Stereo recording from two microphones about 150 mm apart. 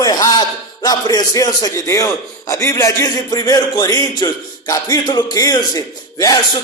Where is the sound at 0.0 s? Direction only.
25° left (ahead or behind).